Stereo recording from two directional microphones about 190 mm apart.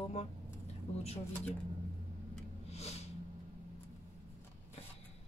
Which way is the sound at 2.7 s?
35° left (ahead or behind).